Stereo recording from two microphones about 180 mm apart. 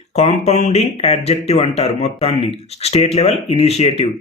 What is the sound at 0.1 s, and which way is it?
Speech, 35° left (ahead or behind).